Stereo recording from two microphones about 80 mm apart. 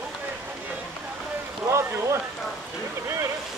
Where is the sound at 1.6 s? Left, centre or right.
Right.